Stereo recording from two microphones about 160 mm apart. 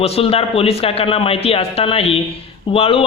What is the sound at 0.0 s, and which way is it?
A man's voice, 35° left (ahead or behind).